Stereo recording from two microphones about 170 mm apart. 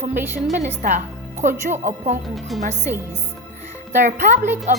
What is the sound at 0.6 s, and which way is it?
A child's voice, 45° right (ahead or behind).